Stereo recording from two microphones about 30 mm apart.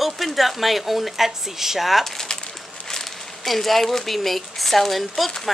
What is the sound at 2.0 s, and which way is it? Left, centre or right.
Speech, centre.